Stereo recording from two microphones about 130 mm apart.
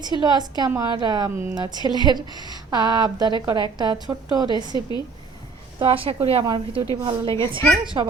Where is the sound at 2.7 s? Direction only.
35° right (ahead or behind).